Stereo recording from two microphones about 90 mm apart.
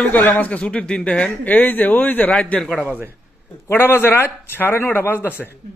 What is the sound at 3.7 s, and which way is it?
A man's voice, 25° left (ahead or behind).